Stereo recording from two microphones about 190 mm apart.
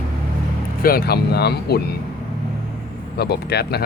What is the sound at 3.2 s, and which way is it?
Speech, 60° left (ahead or behind).